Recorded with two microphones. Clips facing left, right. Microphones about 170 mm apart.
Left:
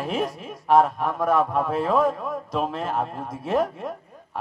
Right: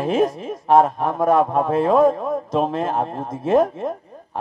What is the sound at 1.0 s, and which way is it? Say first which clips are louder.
Speech: right 5 dB; 25° right (ahead or behind).